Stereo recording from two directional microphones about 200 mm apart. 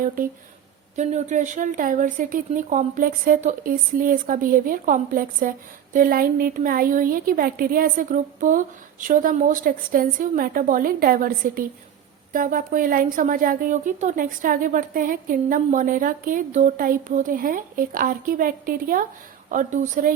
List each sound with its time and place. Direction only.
0.2 s a woman's voice: 45° right (ahead or behind)